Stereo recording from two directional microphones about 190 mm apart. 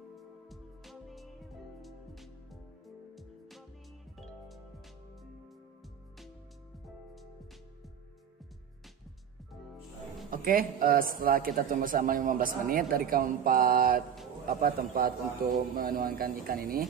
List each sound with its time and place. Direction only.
0.1 s music: centre (ahead or behind)
10.3 s a man's voice: 50° right (ahead or behind)